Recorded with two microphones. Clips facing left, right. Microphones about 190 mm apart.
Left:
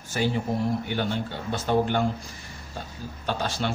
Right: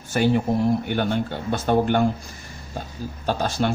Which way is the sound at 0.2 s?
55° right (ahead or behind).